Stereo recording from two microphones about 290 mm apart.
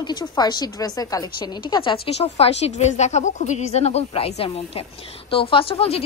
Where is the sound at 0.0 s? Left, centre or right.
Centre.